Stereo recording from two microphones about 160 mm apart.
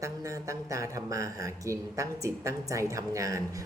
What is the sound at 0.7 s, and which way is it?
A woman's voice, 20° right (ahead or behind).